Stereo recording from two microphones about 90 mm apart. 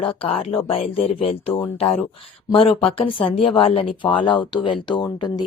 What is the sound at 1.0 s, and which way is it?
Speech, 90° left.